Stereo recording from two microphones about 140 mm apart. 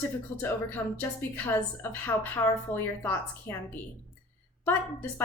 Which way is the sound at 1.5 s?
15° left (ahead or behind).